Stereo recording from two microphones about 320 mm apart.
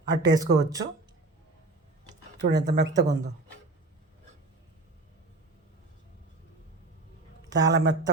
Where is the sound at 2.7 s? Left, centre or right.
Right.